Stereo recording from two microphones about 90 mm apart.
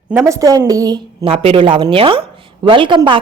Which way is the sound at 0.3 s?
40° right (ahead or behind).